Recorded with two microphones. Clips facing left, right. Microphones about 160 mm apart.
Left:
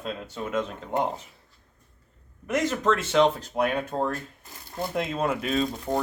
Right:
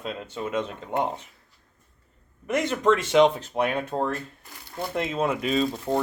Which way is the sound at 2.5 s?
5° left (ahead or behind).